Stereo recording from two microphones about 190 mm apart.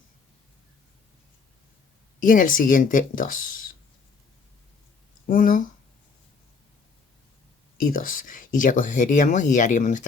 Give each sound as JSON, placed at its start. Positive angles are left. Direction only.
{"t": 2.2, "sound": "speech", "side_deg": 45}
{"t": 5.2, "sound": "speech", "side_deg": 45}
{"t": 7.8, "sound": "speech", "side_deg": 45}